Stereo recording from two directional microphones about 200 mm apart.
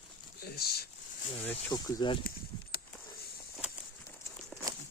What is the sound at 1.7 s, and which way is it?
Speech, 20° left (ahead or behind).